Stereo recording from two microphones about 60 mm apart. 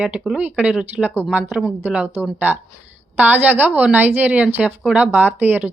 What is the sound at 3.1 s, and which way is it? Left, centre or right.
A woman's voice, right.